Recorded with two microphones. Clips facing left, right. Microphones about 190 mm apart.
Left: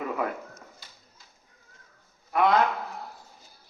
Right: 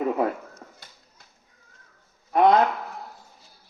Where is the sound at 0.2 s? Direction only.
30° right (ahead or behind).